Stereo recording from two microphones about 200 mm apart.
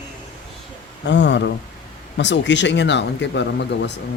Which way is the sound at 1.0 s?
60° left (ahead or behind).